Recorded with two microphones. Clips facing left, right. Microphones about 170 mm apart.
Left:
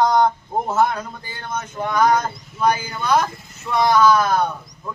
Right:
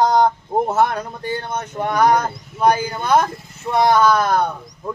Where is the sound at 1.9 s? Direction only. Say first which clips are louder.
Right 1 dB; 60° right (ahead or behind).